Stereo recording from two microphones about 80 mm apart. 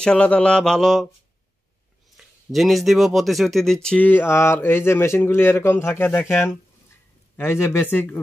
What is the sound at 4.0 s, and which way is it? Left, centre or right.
Speech, left.